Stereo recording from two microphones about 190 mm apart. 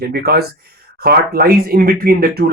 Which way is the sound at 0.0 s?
55° right (ahead or behind).